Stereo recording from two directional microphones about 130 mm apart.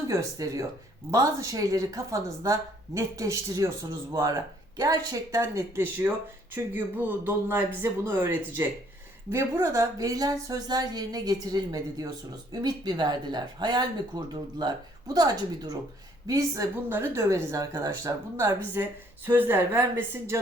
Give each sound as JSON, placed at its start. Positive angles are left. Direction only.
{"t": 0.1, "sound": "a woman's voice", "side_deg": -25}